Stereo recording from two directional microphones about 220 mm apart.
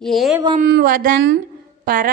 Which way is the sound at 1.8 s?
40° right (ahead or behind).